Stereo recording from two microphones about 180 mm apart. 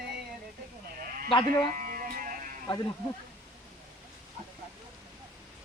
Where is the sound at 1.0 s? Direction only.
55° right (ahead or behind).